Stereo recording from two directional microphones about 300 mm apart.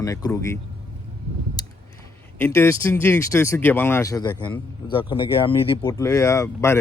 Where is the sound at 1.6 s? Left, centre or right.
Centre.